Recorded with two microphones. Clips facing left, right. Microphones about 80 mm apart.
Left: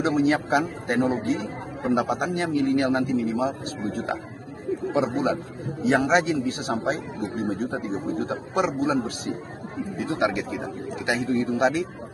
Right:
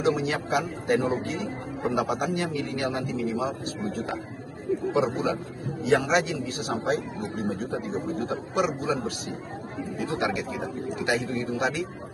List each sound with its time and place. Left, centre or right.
0.0 s a man's voice: left
3.4 s a man's voice: left
10.0 s a man's voice: left